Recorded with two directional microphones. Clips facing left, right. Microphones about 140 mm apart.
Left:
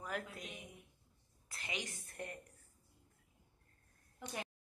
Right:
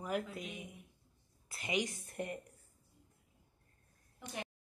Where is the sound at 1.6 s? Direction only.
15° right (ahead or behind).